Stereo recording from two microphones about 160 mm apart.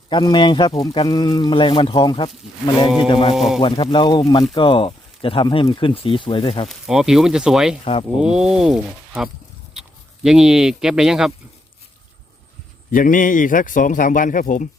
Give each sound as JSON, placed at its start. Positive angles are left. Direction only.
{"t": 0.1, "sound": "a man's voice", "side_deg": 30}
{"t": 3.3, "sound": "speech", "side_deg": 0}
{"t": 3.6, "sound": "a man's voice", "side_deg": 35}
{"t": 6.7, "sound": "speech", "side_deg": 0}
{"t": 12.9, "sound": "speech", "side_deg": 55}